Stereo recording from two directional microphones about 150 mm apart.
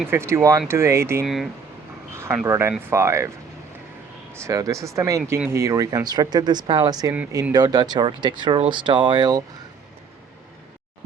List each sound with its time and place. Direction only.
0.1 s speech: 15° right (ahead or behind)
1.2 s speech: centre (ahead or behind)
2.1 s speech: 15° right (ahead or behind)
4.4 s speech: 20° right (ahead or behind)